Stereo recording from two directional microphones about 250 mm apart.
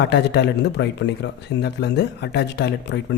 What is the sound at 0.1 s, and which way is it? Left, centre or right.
Speech, left.